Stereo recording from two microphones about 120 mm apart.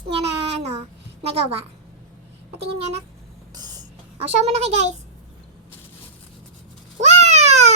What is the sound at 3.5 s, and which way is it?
Writing, 35° right (ahead or behind).